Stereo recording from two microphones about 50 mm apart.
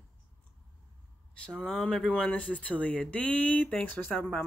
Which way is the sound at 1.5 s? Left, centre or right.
Centre.